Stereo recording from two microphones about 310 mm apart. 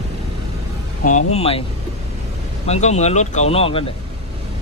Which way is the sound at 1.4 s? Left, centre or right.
Centre.